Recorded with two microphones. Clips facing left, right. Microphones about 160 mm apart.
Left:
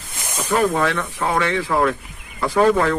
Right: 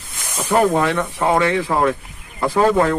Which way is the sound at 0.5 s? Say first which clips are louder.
Right 3 dB; 15° right (ahead or behind).